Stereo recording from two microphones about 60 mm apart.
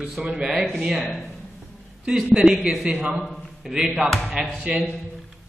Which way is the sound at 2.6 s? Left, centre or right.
Centre.